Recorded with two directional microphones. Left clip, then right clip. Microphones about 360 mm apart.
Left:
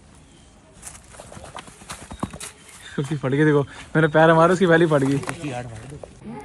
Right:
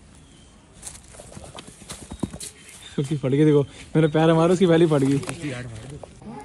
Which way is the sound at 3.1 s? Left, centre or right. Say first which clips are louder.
Even; centre.